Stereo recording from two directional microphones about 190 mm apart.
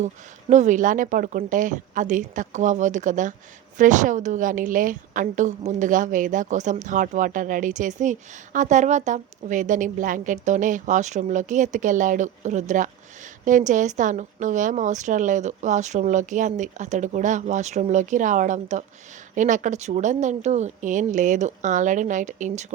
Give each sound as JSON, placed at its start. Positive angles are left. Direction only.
{"t": 0.5, "sound": "a woman's voice", "side_deg": -40}